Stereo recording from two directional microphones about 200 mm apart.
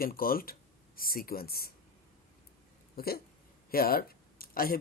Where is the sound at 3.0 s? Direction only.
50° left (ahead or behind).